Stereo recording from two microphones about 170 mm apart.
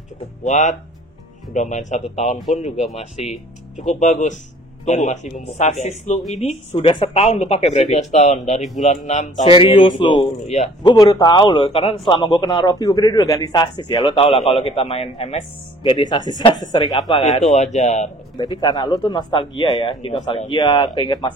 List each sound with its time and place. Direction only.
0.4 s speech: 45° left (ahead or behind)
9.6 s a man's voice: 30° left (ahead or behind)
17.2 s speech: 40° left (ahead or behind)
18.4 s a man's voice: 25° left (ahead or behind)